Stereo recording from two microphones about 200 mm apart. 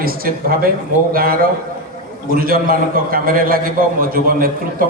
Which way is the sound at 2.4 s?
45° right (ahead or behind).